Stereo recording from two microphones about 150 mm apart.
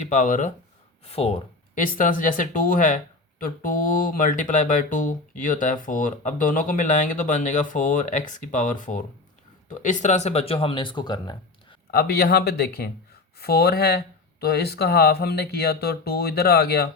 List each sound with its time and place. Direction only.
0.0 s speech: 55° left (ahead or behind)
1.0 s speech: 40° left (ahead or behind)
1.7 s speech: 65° left (ahead or behind); by 11.3 s 30° left (ahead or behind)
11.9 s speech: 90° left